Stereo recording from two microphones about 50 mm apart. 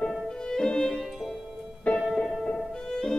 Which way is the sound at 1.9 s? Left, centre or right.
Left.